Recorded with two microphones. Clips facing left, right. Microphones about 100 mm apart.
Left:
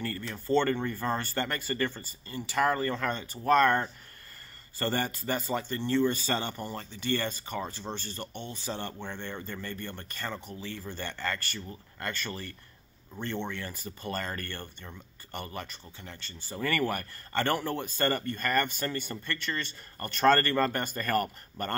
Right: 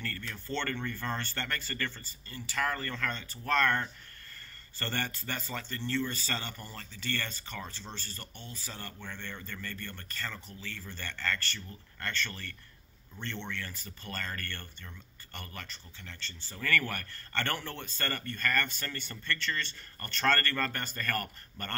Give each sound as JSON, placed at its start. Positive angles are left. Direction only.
{"t": 0.0, "sound": "speech", "side_deg": 20}